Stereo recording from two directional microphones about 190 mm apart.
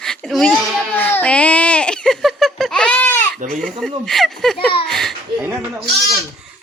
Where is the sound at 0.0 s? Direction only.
Centre (ahead or behind).